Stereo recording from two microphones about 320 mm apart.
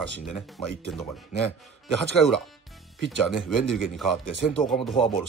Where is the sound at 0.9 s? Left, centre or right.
Centre.